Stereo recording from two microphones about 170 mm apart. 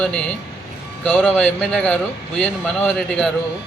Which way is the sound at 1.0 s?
10° left (ahead or behind).